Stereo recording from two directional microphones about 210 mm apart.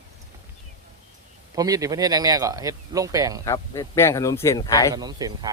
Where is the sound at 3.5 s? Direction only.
15° left (ahead or behind).